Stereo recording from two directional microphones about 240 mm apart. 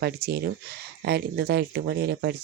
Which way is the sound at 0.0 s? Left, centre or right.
Right.